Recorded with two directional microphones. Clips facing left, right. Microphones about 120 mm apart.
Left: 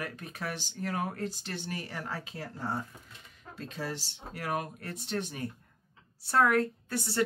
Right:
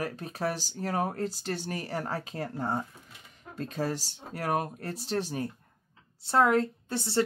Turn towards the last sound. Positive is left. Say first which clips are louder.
# right 2 dB
turn(degrees=-25)  # may be behind; listen again after turning